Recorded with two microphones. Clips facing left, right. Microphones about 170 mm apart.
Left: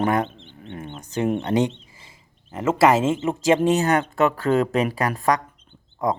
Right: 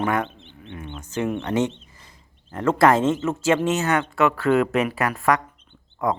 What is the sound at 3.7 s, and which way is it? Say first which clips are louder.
Speech: left 3 dB; 35° left (ahead or behind).